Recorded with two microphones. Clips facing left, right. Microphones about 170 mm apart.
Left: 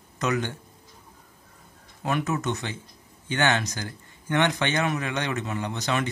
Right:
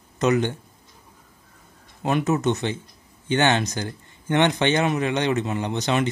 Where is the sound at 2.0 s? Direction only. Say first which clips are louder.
Right 5 dB; 25° right (ahead or behind).